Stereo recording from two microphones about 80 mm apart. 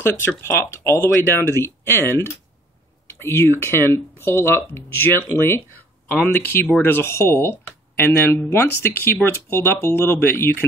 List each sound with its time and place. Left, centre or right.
0.0 s speech: left